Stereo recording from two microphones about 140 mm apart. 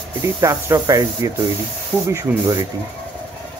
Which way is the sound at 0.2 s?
20° right (ahead or behind).